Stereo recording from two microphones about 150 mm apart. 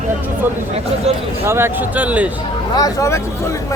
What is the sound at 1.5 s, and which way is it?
Speech, 15° right (ahead or behind).